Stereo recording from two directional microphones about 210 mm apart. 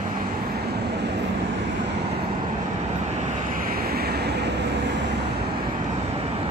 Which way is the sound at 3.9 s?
50° right (ahead or behind).